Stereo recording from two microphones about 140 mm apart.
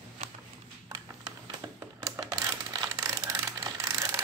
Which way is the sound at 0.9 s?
25° right (ahead or behind).